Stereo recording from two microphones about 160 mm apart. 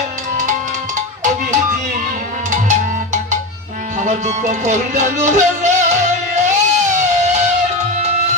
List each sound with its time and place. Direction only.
0.9 s music: 50° right (ahead or behind)